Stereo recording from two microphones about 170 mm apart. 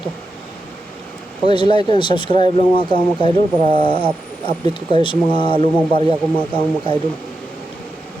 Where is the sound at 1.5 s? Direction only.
25° left (ahead or behind).